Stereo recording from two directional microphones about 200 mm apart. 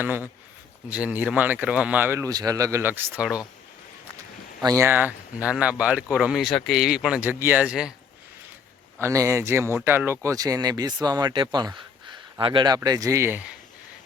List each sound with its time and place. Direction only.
0.0 s speech: 10° right (ahead or behind)
4.6 s speech: 15° right (ahead or behind)
9.0 s speech: 15° right (ahead or behind)